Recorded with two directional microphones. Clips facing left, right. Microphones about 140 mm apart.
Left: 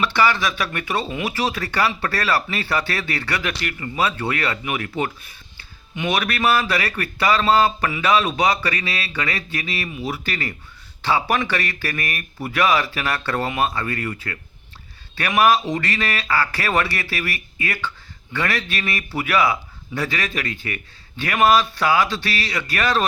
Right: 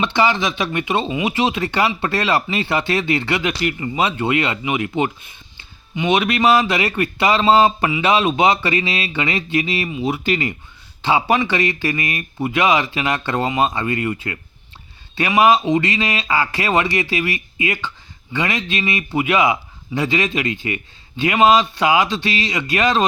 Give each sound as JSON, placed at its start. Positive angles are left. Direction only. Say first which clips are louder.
{"t": 0.0, "sound": "a man's voice", "louder": "right 2 dB", "side_deg": -20}